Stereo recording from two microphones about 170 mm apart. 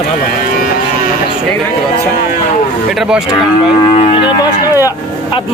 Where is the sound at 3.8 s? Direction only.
35° left (ahead or behind).